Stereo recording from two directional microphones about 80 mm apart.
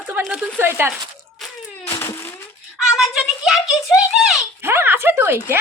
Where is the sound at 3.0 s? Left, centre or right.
Centre.